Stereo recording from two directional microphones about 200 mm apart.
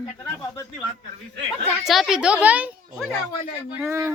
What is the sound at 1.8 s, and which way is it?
A child's voice, centre (ahead or behind).